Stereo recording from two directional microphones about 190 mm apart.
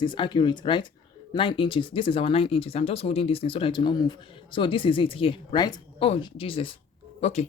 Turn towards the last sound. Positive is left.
turn(degrees=35)  # may be behind; listen again after turning